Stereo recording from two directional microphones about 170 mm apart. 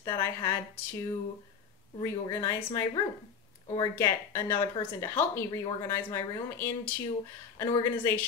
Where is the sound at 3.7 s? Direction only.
20° left (ahead or behind).